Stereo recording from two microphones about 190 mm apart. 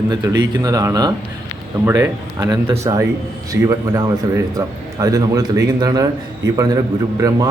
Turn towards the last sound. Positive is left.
turn(degrees=-20)  # may be behind; listen again after turning